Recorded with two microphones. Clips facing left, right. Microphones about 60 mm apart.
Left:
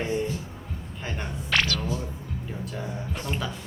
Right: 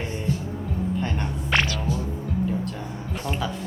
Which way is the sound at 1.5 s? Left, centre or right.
Centre.